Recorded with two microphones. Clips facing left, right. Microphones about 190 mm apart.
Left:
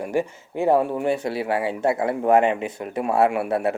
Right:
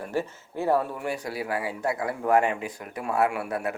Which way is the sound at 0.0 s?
15° left (ahead or behind).